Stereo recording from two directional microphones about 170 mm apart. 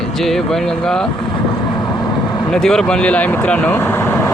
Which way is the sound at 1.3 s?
25° left (ahead or behind).